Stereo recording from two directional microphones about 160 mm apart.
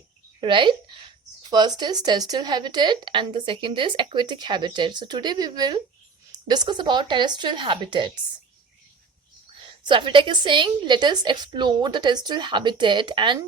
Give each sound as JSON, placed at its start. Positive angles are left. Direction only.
{"t": 0.3, "sound": "a woman's voice", "side_deg": -30}
{"t": 9.8, "sound": "speech", "side_deg": -30}